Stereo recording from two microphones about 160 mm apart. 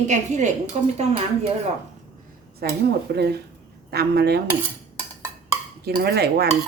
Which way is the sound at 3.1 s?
90° right.